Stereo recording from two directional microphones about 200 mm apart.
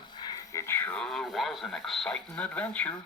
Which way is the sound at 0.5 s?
10° left (ahead or behind).